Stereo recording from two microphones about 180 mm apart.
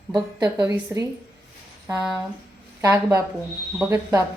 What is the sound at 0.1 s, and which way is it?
Speech, 20° right (ahead or behind).